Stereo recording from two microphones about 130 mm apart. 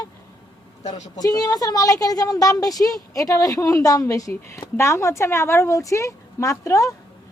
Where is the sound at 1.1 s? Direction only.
30° left (ahead or behind).